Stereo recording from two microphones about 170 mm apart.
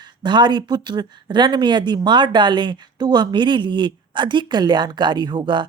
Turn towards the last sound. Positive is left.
turn(degrees=-25)  # may be behind; listen again after turning